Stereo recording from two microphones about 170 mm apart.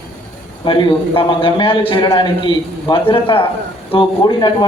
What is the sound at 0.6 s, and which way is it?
A man's voice, 30° left (ahead or behind).